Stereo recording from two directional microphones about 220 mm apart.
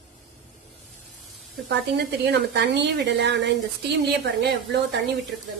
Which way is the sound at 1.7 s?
50° right (ahead or behind).